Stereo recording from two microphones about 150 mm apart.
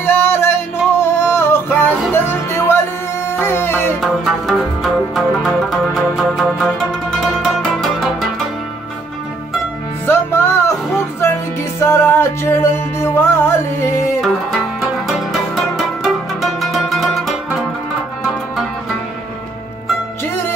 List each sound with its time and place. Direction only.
0.0 s music: 15° left (ahead or behind)
4.0 s music: centre (ahead or behind)
10.0 s music: 15° left (ahead or behind)
14.2 s music: centre (ahead or behind)